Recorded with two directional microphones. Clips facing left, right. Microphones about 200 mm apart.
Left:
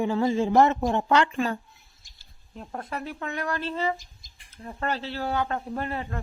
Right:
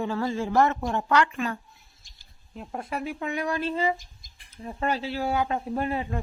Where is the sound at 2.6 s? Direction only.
10° right (ahead or behind).